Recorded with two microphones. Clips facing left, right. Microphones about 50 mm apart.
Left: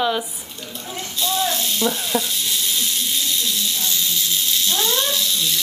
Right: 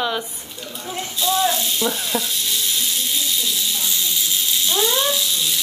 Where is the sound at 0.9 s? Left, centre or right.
Centre.